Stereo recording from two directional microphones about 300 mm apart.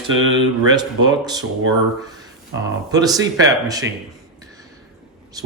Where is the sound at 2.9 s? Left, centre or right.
Centre.